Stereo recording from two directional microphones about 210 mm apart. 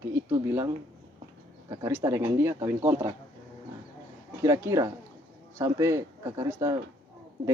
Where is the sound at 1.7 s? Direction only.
15° right (ahead or behind).